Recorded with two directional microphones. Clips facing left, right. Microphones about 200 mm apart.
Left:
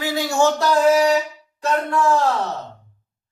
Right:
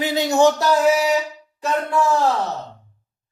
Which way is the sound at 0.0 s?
20° right (ahead or behind).